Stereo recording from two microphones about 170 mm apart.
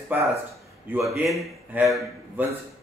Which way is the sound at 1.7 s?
10° right (ahead or behind).